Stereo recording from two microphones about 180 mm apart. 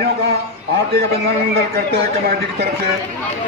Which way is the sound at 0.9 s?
55° right (ahead or behind).